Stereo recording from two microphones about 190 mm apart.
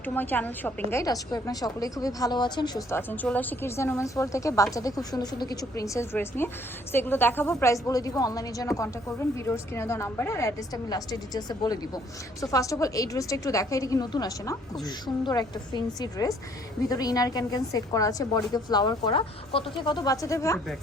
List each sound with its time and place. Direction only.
0.0 s a woman's voice: 10° left (ahead or behind)